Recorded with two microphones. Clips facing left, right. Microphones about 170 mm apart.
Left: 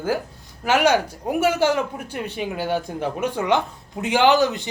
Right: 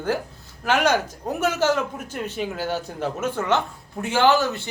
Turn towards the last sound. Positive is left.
turn(degrees=15)  # may be behind; listen again after turning